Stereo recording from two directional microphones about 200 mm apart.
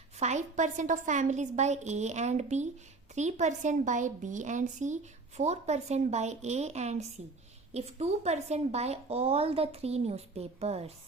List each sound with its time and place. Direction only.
0.2 s a woman's voice: 35° right (ahead or behind)